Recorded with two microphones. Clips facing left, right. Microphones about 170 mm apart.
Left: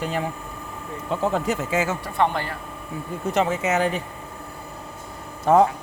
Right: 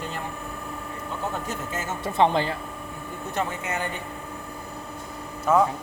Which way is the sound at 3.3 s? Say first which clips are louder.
Left 7 dB; 90° left.